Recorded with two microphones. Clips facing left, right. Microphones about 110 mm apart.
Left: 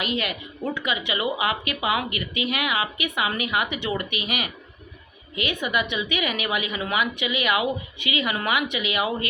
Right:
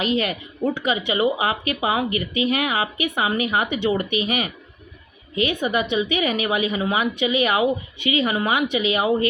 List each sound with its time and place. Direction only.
0.0 s a woman's voice: 35° right (ahead or behind)